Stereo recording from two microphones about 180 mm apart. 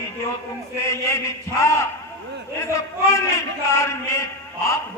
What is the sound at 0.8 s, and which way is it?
A man's voice, 15° left (ahead or behind).